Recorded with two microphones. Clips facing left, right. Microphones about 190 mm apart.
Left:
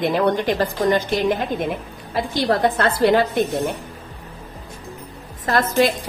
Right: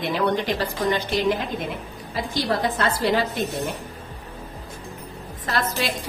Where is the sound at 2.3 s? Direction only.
55° left (ahead or behind).